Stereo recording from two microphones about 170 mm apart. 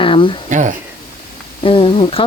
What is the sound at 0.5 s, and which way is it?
Speech, 45° right (ahead or behind).